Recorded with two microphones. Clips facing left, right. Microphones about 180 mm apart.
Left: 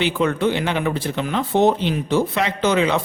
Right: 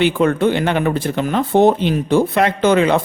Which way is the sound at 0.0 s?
50° right (ahead or behind).